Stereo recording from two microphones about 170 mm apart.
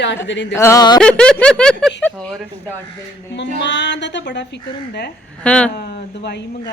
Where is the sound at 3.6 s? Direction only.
90° left.